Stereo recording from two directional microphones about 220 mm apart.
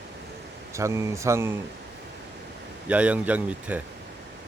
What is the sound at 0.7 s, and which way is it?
Speech, 15° right (ahead or behind).